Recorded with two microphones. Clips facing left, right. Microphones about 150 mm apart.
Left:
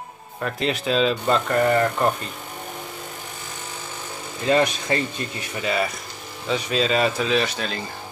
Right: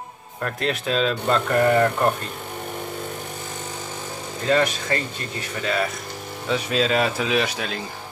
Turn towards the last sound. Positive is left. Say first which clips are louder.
# even
turn(degrees=-5)  # may be behind; listen again after turning